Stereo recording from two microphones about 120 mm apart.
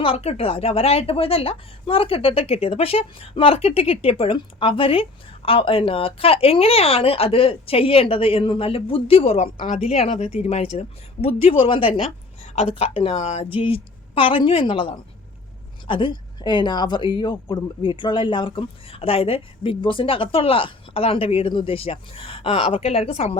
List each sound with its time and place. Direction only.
0.0 s a woman's voice: 55° left (ahead or behind)